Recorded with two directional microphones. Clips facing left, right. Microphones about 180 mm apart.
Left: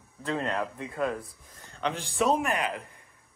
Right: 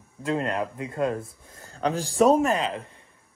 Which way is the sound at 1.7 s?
35° right (ahead or behind).